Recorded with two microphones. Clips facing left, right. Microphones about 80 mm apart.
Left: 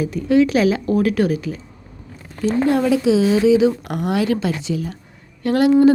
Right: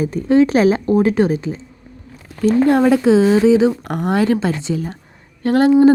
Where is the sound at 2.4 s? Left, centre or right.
Right.